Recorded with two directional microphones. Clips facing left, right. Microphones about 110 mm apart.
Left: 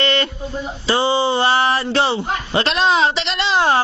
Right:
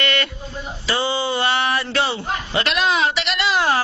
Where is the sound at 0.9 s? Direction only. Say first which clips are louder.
Left 5 dB; 30° left (ahead or behind).